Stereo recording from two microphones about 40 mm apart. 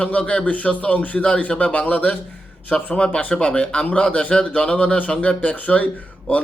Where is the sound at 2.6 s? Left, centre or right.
Left.